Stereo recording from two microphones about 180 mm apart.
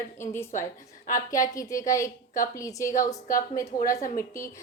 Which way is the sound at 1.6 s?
20° left (ahead or behind).